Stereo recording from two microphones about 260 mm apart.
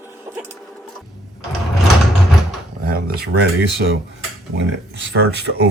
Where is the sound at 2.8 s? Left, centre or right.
Right.